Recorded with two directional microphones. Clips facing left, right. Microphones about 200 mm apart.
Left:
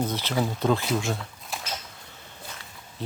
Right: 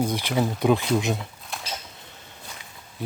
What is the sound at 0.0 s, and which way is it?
Speech, 10° right (ahead or behind).